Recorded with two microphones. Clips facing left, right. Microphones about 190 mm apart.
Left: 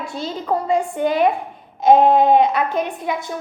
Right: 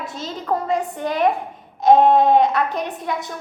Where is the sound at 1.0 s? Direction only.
Centre (ahead or behind).